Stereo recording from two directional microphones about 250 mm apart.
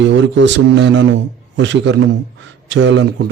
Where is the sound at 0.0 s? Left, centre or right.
Right.